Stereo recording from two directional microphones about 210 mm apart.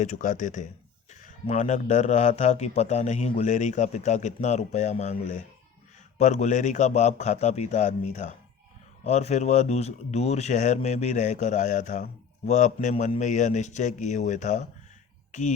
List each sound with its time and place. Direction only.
0.0 s speech: 35° left (ahead or behind)